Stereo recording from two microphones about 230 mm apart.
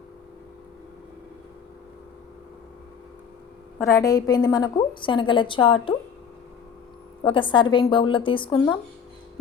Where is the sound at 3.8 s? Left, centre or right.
Centre.